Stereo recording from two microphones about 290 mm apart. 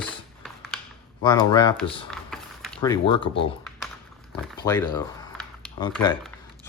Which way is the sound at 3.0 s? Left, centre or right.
Centre.